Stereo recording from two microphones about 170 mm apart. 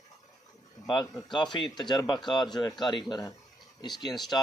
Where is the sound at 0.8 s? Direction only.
30° left (ahead or behind).